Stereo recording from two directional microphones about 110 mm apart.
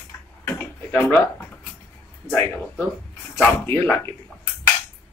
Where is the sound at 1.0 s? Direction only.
10° left (ahead or behind).